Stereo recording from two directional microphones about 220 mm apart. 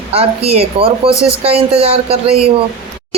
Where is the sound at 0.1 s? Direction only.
25° right (ahead or behind).